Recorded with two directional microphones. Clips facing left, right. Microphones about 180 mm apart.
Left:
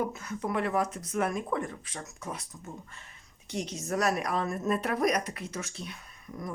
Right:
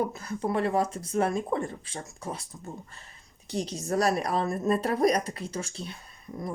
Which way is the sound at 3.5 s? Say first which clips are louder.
Right 3 dB; 35° right (ahead or behind).